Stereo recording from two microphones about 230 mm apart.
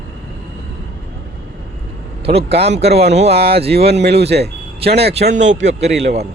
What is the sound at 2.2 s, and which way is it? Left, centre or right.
Speech, right.